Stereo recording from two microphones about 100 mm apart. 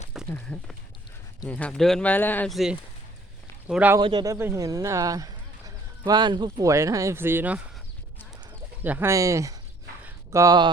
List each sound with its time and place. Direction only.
0.1 s a sound: centre (ahead or behind)
1.5 s speech: 15° left (ahead or behind)
2.0 s speech: 20° left (ahead or behind)
2.5 s speech: centre (ahead or behind)
3.7 s speech: 15° right (ahead or behind)
4.4 s speech: 25° right (ahead or behind)
4.6 s speech: 35° right (ahead or behind)
6.7 s speech: 30° right (ahead or behind)
8.8 s speech: 20° right (ahead or behind)
9.1 s speech: 30° right (ahead or behind)